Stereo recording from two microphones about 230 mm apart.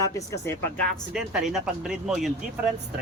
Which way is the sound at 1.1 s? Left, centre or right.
Centre.